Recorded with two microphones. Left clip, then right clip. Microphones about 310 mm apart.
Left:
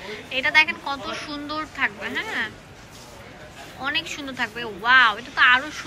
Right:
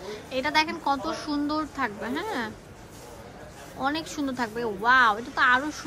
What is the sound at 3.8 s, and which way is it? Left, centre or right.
A woman's voice, centre.